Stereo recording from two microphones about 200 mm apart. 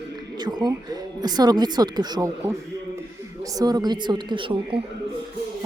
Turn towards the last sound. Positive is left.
turn(degrees=-25)  # may be behind; listen again after turning